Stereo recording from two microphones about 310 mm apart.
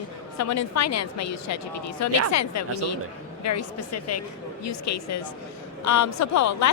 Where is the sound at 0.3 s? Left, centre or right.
Left.